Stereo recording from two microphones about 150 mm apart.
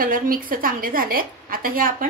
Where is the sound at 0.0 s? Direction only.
70° right (ahead or behind).